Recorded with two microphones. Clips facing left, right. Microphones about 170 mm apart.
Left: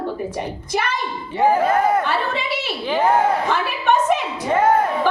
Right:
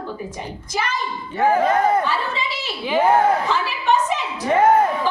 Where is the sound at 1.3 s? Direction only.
15° left (ahead or behind).